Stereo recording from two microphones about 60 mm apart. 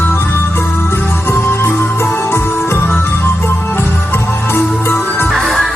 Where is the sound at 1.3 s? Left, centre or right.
Left.